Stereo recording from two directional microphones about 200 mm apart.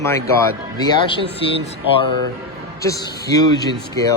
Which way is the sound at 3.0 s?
20° left (ahead or behind).